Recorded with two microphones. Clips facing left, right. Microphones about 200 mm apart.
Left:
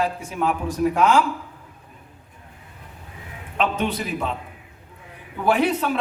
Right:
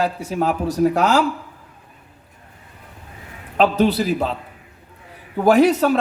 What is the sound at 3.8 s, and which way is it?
Speech, 35° right (ahead or behind).